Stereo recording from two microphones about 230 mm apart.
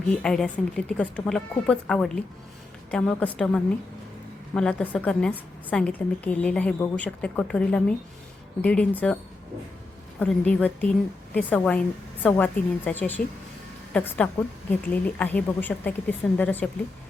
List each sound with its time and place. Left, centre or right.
0.1 s a woman's voice: centre
10.2 s a woman's voice: centre